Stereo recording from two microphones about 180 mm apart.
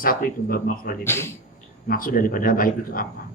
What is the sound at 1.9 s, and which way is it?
Speech, 50° left (ahead or behind).